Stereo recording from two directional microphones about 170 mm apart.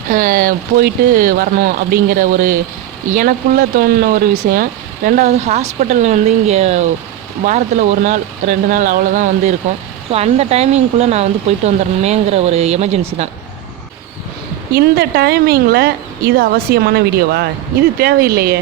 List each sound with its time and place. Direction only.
0.1 s speech: 55° right (ahead or behind)
14.7 s speech: 65° right (ahead or behind)